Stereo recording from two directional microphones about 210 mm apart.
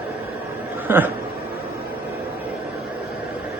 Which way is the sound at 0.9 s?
10° right (ahead or behind).